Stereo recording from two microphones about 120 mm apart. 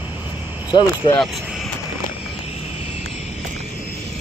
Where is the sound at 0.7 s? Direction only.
40° left (ahead or behind).